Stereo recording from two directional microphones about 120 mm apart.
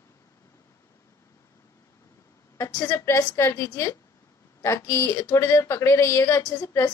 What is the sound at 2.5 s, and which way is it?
A woman's voice, 25° left (ahead or behind).